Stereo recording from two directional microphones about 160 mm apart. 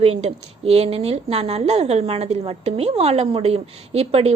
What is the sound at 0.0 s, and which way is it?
A woman's voice, 40° right (ahead or behind).